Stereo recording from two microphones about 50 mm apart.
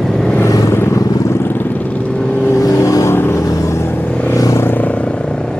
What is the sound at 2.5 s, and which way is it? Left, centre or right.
Vehicle, left.